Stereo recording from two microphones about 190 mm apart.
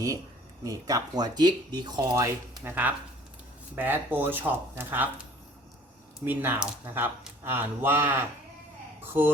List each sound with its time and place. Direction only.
0.6 s speech: 20° right (ahead or behind)
6.2 s speech: 10° right (ahead or behind)